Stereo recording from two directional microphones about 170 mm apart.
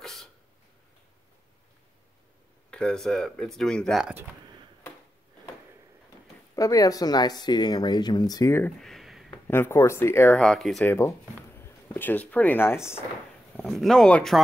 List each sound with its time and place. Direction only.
0.0 s a sound: centre (ahead or behind)
2.7 s speech: 5° left (ahead or behind)
6.5 s speech: 20° left (ahead or behind)
8.8 s a sound: centre (ahead or behind)
9.3 s speech: 15° left (ahead or behind)
10.3 s speech: 5° left (ahead or behind)
10.9 s speech: 15° left (ahead or behind)
13.6 s speech: centre (ahead or behind)